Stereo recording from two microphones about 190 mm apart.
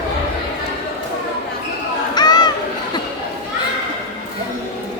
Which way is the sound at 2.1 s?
20° left (ahead or behind).